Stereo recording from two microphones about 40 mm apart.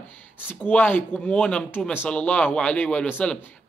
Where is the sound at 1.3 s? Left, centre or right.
Left.